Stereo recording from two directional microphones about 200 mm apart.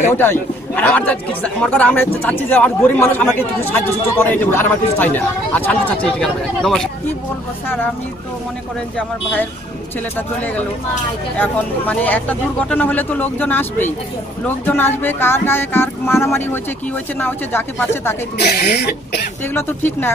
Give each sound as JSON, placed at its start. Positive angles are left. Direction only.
{"t": 0.2, "sound": "speech", "side_deg": 10}
{"t": 8.9, "sound": "speech", "side_deg": 10}
{"t": 18.4, "sound": "speech", "side_deg": 55}
{"t": 19.4, "sound": "speech", "side_deg": 10}